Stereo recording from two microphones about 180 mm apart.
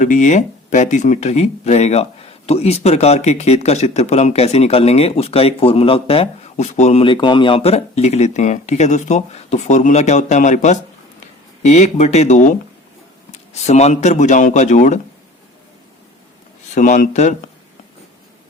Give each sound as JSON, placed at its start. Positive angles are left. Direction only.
{"t": 0.0, "sound": "speech", "side_deg": 45}
{"t": 16.7, "sound": "speech", "side_deg": 45}